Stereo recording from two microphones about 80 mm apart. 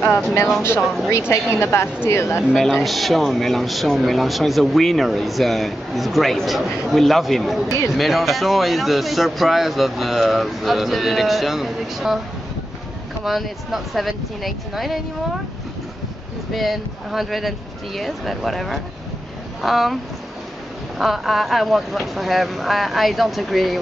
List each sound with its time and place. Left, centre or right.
1.3 s a woman's voice: left
2.5 s speech: centre
13.2 s speech: centre
16.5 s speech: centre
21.0 s speech: centre